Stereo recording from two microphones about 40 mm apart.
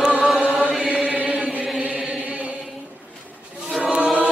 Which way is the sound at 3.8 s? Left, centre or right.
Right.